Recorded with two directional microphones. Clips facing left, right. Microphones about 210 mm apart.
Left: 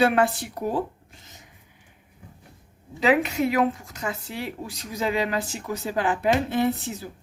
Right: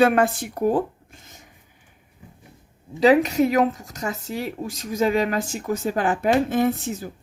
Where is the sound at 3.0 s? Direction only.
40° right (ahead or behind).